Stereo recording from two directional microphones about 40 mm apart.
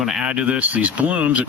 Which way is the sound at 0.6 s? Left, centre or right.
Right.